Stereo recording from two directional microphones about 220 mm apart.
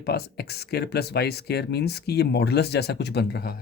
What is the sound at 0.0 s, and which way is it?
Speech, 45° left (ahead or behind).